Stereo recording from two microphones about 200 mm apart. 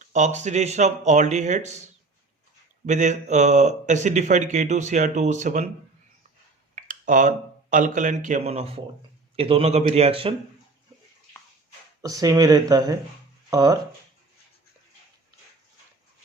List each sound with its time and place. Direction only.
0.0 s a man's voice: 35° right (ahead or behind)
2.8 s a man's voice: 35° right (ahead or behind)
6.7 s a man's voice: 40° right (ahead or behind)
12.0 s speech: 15° right (ahead or behind)